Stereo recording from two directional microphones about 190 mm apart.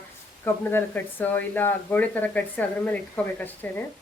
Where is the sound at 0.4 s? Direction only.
10° left (ahead or behind).